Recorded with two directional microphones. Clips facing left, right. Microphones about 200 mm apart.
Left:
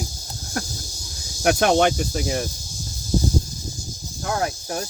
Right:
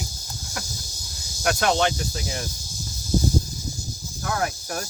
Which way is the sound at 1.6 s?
55° left (ahead or behind).